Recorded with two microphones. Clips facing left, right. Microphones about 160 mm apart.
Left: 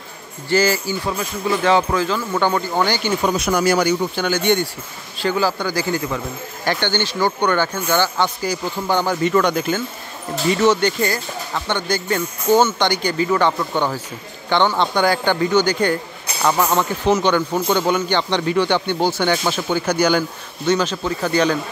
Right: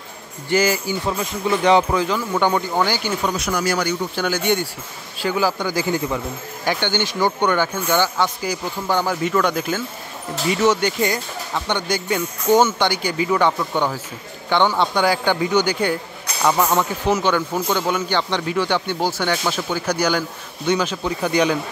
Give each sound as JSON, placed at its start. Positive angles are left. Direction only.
{"t": 0.5, "sound": "speech", "side_deg": -15}
{"t": 2.7, "sound": "a man's voice", "side_deg": -5}
{"t": 3.3, "sound": "speech", "side_deg": 20}
{"t": 4.1, "sound": "a man's voice", "side_deg": 0}
{"t": 20.6, "sound": "speech", "side_deg": -10}